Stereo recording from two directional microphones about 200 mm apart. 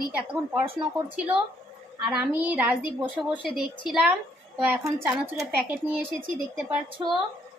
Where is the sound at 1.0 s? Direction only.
5° right (ahead or behind).